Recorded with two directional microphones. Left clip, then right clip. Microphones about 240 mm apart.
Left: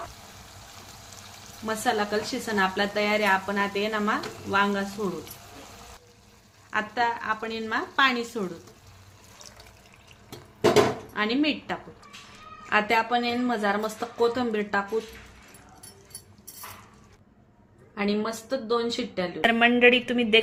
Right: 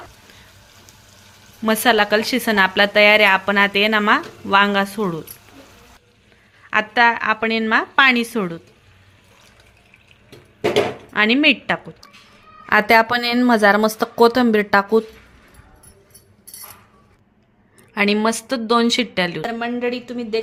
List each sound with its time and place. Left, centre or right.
1.6 s speech: right
6.7 s speech: right
11.1 s speech: right
12.7 s a woman's voice: right
17.9 s a woman's voice: right
19.4 s a woman's voice: centre